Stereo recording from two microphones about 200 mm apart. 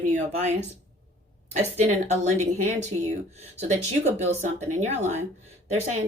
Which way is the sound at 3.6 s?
35° right (ahead or behind).